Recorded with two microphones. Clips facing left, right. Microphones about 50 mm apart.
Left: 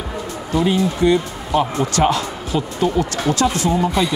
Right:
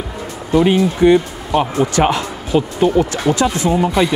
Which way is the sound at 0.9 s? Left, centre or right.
Right.